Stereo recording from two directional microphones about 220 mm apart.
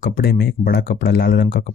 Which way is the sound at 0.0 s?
45° left (ahead or behind).